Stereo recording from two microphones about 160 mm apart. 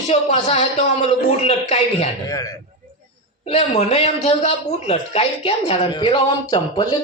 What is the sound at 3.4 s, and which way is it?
A man's voice, 40° left (ahead or behind).